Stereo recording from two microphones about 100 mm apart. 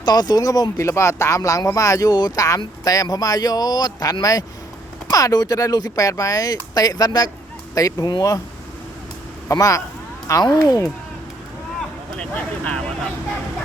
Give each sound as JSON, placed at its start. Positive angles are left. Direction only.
{"t": 0.0, "sound": "speech", "side_deg": 45}
{"t": 9.5, "sound": "speech", "side_deg": 30}
{"t": 12.1, "sound": "speech", "side_deg": 10}